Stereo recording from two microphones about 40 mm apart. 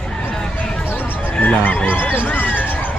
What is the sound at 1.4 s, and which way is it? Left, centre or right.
Speech, left.